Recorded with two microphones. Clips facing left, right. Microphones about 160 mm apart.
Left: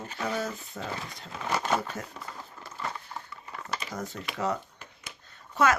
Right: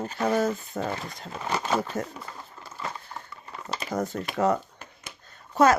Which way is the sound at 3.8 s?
50° right (ahead or behind).